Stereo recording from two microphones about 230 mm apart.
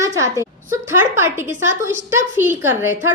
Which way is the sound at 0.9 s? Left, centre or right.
Centre.